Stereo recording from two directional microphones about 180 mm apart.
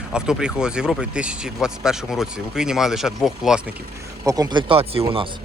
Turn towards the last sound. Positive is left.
turn(degrees=-30)  # may be behind; listen again after turning